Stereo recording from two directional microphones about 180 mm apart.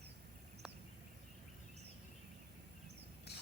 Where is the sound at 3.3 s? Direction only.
65° left (ahead or behind).